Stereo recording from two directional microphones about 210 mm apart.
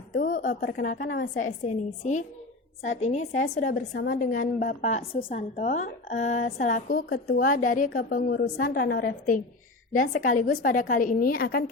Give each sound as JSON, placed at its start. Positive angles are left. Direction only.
{"t": 0.1, "sound": "a woman's voice", "side_deg": 40}